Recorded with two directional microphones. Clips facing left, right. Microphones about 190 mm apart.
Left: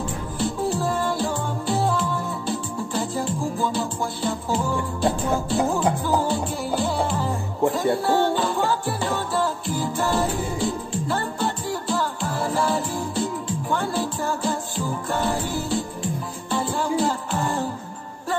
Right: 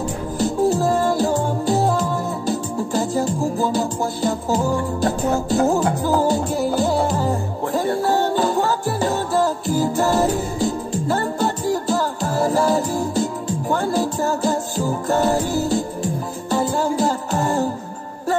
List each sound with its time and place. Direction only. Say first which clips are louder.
0.4 s music: right 6 dB; 40° right (ahead or behind)